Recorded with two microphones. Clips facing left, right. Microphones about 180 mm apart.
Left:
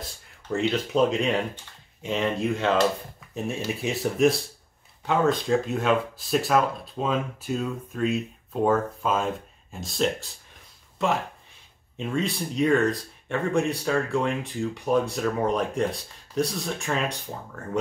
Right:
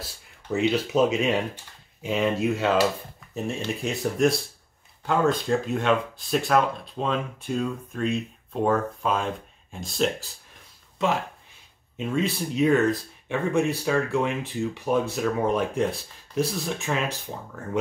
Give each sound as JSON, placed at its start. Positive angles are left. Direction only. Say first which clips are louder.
{"t": 0.5, "sound": "speech", "louder": "right 2 dB", "side_deg": -5}